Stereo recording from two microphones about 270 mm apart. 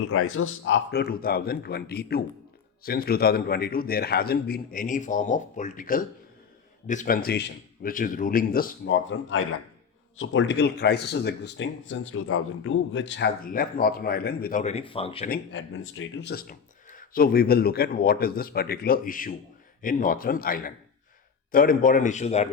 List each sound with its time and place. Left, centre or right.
0.1 s speech: left
15.3 s a man's voice: left